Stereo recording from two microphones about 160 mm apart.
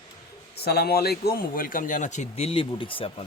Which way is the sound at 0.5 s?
80° left.